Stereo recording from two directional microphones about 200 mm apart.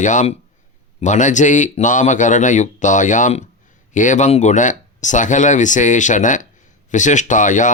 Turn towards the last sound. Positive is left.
turn(degrees=40)  # may be behind; listen again after turning